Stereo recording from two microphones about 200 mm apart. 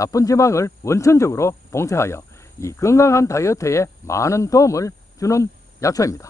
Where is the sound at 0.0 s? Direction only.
15° left (ahead or behind).